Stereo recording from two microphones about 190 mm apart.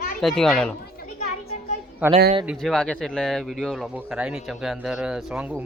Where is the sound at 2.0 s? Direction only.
10° right (ahead or behind).